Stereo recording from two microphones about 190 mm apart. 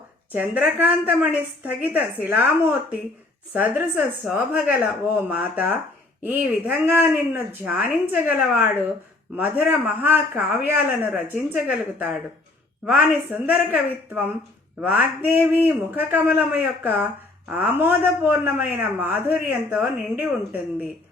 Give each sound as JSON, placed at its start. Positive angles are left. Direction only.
{"t": 0.3, "sound": "a man's voice", "side_deg": -10}